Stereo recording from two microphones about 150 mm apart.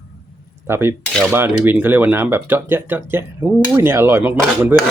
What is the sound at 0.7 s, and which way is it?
Speech, 15° right (ahead or behind).